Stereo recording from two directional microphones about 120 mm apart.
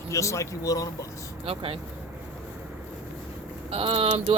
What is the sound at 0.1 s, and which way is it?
Speech, 25° left (ahead or behind).